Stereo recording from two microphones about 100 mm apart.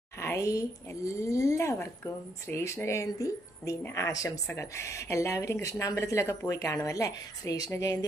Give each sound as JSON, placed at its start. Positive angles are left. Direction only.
{"t": 0.2, "sound": "speech", "side_deg": 30}